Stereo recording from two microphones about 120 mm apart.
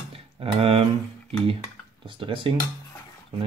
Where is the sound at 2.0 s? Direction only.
45° right (ahead or behind).